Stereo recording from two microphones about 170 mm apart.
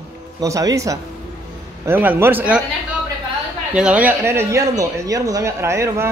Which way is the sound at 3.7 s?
5° right (ahead or behind).